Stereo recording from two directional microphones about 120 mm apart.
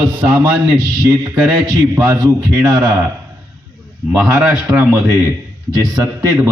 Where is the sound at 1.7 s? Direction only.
30° right (ahead or behind).